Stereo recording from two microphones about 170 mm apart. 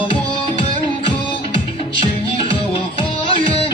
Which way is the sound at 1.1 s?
30° left (ahead or behind).